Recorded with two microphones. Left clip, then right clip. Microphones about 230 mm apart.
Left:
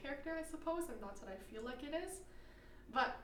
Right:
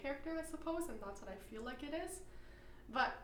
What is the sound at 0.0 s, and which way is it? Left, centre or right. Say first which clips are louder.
A woman's voice: right 1 dB; right.